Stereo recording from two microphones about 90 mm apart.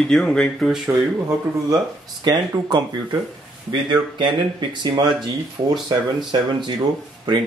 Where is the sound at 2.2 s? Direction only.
55° right (ahead or behind).